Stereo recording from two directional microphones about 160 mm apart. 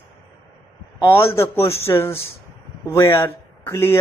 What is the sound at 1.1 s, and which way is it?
Speech, 15° left (ahead or behind).